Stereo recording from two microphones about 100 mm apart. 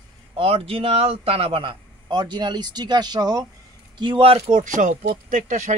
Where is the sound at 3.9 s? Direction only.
55° right (ahead or behind); by 4.5 s 70° right (ahead or behind).